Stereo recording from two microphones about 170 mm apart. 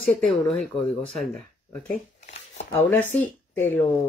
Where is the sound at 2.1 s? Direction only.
40° left (ahead or behind).